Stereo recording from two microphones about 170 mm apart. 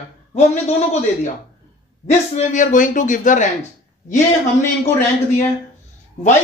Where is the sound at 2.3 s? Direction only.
50° left (ahead or behind).